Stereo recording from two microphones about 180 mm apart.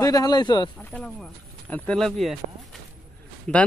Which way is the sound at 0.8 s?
10° left (ahead or behind).